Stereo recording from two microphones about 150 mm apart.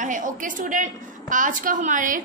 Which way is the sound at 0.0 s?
60° right (ahead or behind).